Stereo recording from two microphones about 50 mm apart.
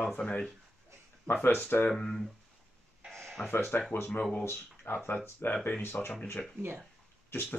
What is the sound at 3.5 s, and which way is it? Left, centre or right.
Speech, left.